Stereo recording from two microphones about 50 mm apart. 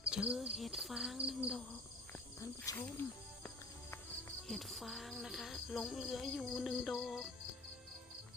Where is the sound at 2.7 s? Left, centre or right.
Left.